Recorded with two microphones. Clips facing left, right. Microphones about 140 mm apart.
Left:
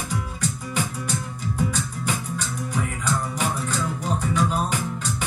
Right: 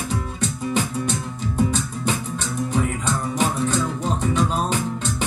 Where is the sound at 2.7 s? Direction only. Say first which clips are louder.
Right 2 dB; 20° right (ahead or behind).